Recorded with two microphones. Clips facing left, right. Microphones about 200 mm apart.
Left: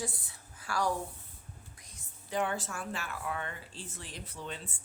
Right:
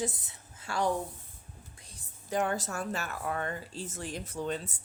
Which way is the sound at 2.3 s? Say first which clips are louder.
Right 3 dB; 45° right (ahead or behind).